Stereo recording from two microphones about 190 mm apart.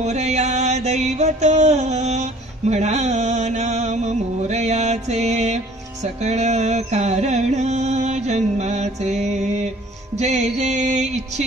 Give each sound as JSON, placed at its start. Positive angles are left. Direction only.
{"t": 0.0, "sound": "mantra", "side_deg": -35}